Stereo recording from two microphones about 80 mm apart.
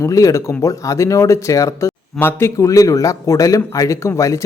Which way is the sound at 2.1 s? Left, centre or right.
Left.